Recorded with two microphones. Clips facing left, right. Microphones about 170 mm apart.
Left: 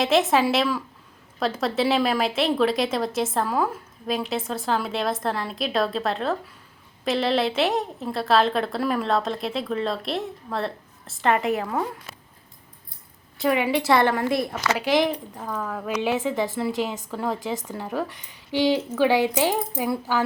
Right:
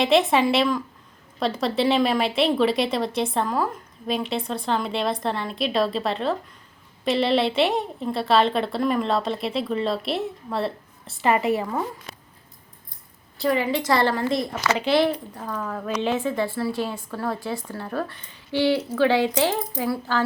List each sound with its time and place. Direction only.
0.0 s speech: centre (ahead or behind)
13.4 s a woman's voice: 5° left (ahead or behind)